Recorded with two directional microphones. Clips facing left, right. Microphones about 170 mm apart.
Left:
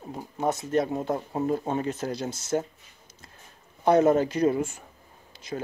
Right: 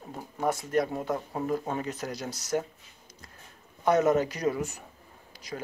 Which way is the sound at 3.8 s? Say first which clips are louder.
Left 3 dB; 30° left (ahead or behind).